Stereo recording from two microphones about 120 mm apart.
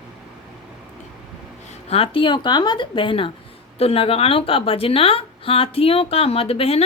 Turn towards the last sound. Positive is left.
turn(degrees=55)  # may be behind; listen again after turning